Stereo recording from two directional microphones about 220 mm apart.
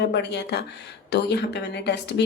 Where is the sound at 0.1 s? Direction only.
50° left (ahead or behind).